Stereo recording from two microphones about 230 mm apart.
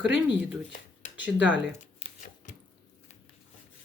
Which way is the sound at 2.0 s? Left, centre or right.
Left.